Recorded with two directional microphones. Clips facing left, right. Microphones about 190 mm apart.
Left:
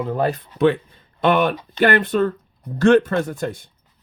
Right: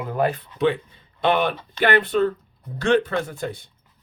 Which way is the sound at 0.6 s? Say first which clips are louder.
Left 4 dB; 50° left (ahead or behind).